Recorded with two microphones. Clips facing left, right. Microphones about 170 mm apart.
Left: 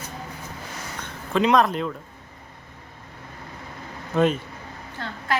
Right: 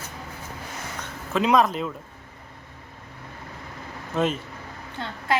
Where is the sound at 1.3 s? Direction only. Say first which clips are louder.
Left 1 dB; 5° right (ahead or behind).